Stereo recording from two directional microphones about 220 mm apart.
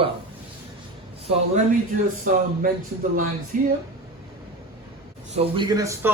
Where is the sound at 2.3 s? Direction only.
40° right (ahead or behind).